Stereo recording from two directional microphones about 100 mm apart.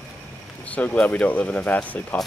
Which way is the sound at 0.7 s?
15° left (ahead or behind).